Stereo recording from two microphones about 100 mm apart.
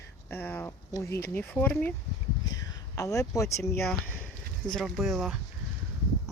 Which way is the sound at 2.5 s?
35° left (ahead or behind).